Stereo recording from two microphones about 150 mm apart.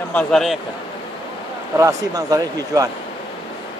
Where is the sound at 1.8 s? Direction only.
20° right (ahead or behind).